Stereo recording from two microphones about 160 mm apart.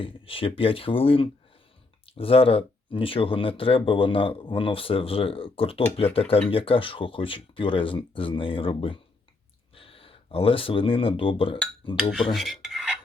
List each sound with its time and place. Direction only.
0.0 s speech: 35° left (ahead or behind)
12.1 s filing: centre (ahead or behind)